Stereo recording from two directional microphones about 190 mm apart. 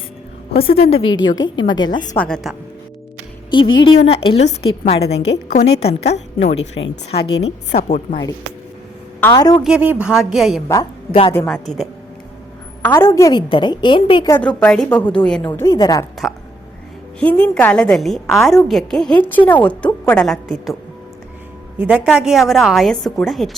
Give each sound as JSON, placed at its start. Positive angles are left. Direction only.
{"t": 0.5, "sound": "a woman's voice", "side_deg": 30}
{"t": 2.1, "sound": "a woman's voice", "side_deg": 5}
{"t": 4.0, "sound": "a woman's voice", "side_deg": 30}
{"t": 4.9, "sound": "a woman's voice", "side_deg": 60}
{"t": 5.5, "sound": "a woman's voice", "side_deg": 35}
{"t": 9.3, "sound": "a woman's voice", "side_deg": 20}
{"t": 9.6, "sound": "a woman's voice", "side_deg": -5}
{"t": 10.7, "sound": "a woman's voice", "side_deg": 25}
{"t": 11.4, "sound": "a woman's voice", "side_deg": 0}
{"t": 12.8, "sound": "a woman's voice", "side_deg": 15}
{"t": 14.3, "sound": "a woman's voice", "side_deg": 5}
{"t": 15.4, "sound": "a woman's voice", "side_deg": 20}
{"t": 17.2, "sound": "a woman's voice", "side_deg": 5}
{"t": 21.8, "sound": "a woman's voice", "side_deg": -5}